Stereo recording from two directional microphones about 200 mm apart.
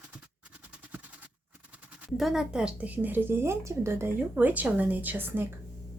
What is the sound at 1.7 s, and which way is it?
Speech, centre (ahead or behind).